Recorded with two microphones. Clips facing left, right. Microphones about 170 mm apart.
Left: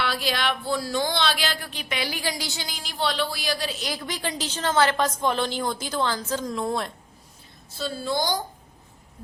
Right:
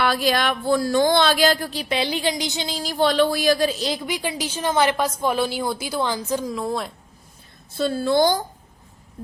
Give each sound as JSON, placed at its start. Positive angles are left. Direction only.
{"t": 0.0, "sound": "speech", "side_deg": -50}
{"t": 2.8, "sound": "speech", "side_deg": -45}
{"t": 3.9, "sound": "a woman's voice", "side_deg": -10}
{"t": 6.5, "sound": "speech", "side_deg": 0}
{"t": 7.8, "sound": "a woman's voice", "side_deg": -55}